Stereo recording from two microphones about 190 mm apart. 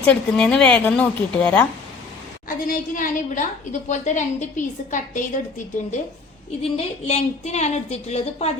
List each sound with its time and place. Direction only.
0.0 s a woman's voice: 5° left (ahead or behind)
2.6 s a woman's voice: 45° left (ahead or behind)
6.6 s a woman's voice: 35° left (ahead or behind)